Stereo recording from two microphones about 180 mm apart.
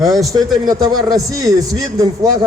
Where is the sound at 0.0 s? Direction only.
Centre (ahead or behind).